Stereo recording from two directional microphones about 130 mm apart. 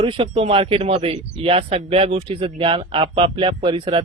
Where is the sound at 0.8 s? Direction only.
55° right (ahead or behind).